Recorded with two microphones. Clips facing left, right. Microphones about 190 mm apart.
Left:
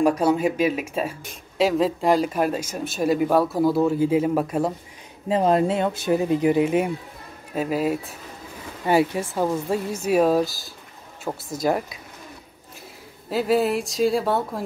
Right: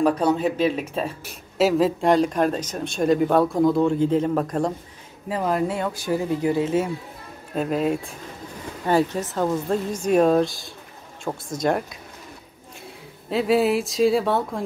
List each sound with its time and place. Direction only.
0.0 s speech: 10° left (ahead or behind)
1.2 s speech: 5° right (ahead or behind)
5.3 s speech: 25° left (ahead or behind)
7.5 s speech: 5° left (ahead or behind)
13.3 s speech: centre (ahead or behind)